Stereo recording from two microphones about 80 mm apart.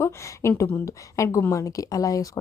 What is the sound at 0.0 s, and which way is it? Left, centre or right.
A woman's voice, left.